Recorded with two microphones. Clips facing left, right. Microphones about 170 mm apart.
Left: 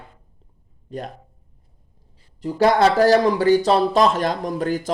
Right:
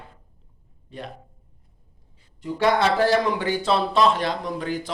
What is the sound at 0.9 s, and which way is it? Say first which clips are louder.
Speech: left 6 dB; 40° left (ahead or behind).